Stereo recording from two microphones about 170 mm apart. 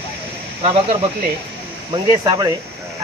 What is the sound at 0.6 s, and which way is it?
Speech, 35° right (ahead or behind).